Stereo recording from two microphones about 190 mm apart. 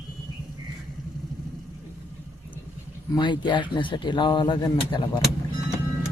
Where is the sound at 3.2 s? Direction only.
25° left (ahead or behind).